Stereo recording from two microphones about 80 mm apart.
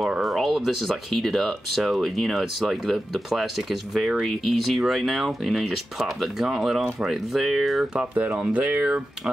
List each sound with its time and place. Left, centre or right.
0.0 s speech: centre
8.0 s speech: centre